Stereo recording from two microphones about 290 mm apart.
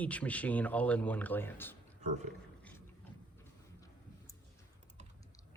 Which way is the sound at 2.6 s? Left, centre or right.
Centre.